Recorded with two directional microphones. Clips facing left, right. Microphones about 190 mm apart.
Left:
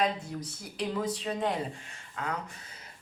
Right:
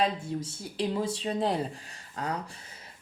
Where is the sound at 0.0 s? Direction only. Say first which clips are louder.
Right 2 dB; 30° right (ahead or behind).